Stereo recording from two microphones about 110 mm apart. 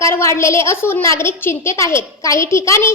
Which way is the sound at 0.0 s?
25° left (ahead or behind).